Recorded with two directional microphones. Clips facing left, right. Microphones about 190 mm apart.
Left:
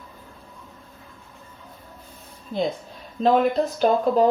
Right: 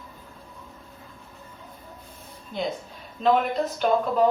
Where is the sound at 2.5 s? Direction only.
35° left (ahead or behind).